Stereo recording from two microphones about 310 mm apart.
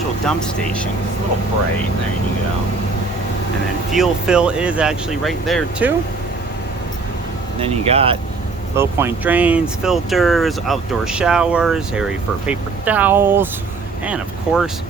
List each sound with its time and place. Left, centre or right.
0.3 s speech: centre
3.9 s speech: centre
7.6 s speech: centre
8.7 s speech: centre